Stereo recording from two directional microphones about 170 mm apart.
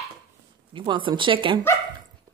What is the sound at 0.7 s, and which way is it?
Speech, 30° right (ahead or behind).